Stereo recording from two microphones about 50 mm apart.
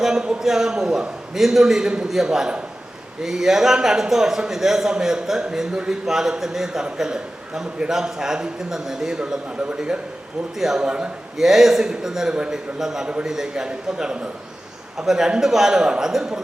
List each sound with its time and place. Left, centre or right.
0.0 s a man's voice: centre
11.3 s a man's voice: centre